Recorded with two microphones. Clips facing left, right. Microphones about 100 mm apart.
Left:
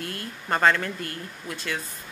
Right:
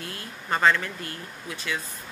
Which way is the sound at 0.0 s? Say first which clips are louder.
Left 3 dB; 55° left (ahead or behind).